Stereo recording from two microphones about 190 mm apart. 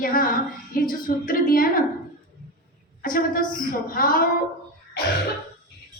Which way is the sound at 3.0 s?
45° left (ahead or behind).